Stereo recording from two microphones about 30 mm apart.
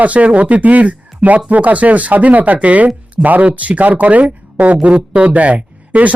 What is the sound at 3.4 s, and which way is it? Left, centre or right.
Speech, right.